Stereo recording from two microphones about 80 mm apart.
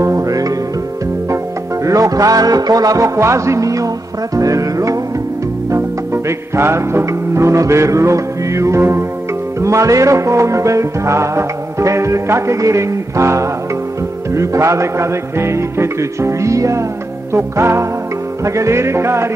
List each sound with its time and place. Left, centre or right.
0.0 s music: right
1.9 s music: right
3.2 s music: right